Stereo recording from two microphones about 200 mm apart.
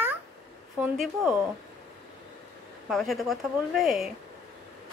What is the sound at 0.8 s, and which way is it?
Speech, centre (ahead or behind).